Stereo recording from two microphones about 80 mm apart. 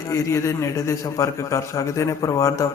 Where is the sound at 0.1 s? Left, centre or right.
Left.